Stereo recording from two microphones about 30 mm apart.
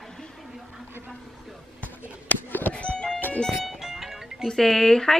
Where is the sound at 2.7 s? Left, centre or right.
Left.